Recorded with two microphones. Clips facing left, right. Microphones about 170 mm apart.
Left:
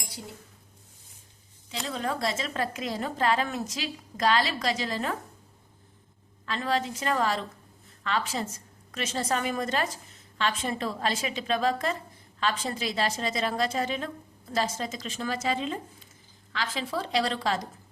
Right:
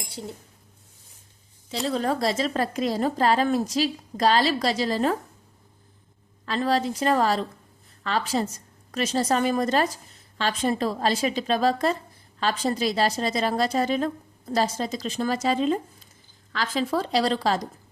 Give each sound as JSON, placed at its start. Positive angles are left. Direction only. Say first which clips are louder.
{"t": 1.9, "sound": "a woman's voice", "louder": "right 5 dB", "side_deg": -35}
{"t": 6.4, "sound": "a woman's voice", "louder": "right 5 dB", "side_deg": -35}